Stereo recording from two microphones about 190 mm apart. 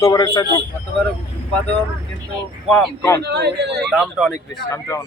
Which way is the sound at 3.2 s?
60° right (ahead or behind).